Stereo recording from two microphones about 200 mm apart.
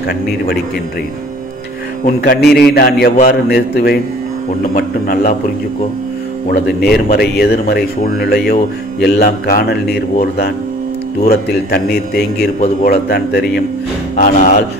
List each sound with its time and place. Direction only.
2.0 s speech: 50° left (ahead or behind)
6.5 s speech: 50° left (ahead or behind)
14.1 s speech: 40° left (ahead or behind)